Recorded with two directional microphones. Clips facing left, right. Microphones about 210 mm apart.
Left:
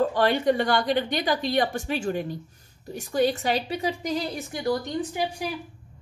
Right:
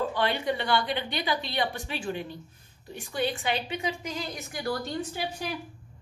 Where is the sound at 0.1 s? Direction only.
45° left (ahead or behind); by 5.2 s 20° left (ahead or behind).